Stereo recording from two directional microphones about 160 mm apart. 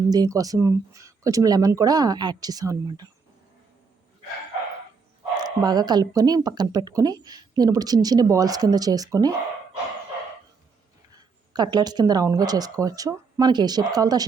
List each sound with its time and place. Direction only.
0.1 s speech: 25° right (ahead or behind)
5.4 s speech: 25° right (ahead or behind)
11.1 s speech: 25° right (ahead or behind)